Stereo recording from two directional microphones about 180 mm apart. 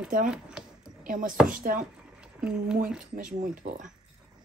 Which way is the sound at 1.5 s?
50° right (ahead or behind).